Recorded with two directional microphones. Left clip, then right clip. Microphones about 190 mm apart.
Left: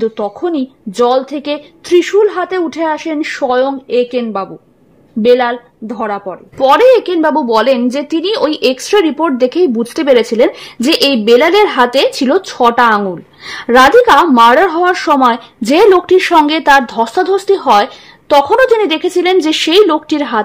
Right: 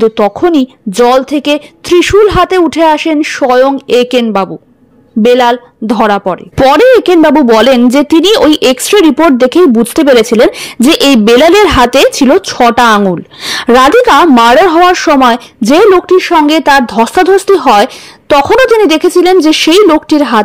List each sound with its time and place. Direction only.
0.0 s speech: 30° right (ahead or behind)
5.9 s speech: 35° right (ahead or behind)